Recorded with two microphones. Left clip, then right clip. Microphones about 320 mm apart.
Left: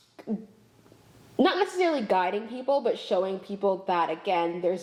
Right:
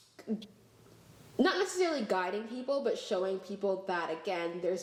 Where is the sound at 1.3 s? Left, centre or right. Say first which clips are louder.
Left 6 dB; left.